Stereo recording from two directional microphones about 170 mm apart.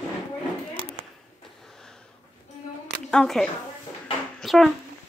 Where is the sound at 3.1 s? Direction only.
5° left (ahead or behind).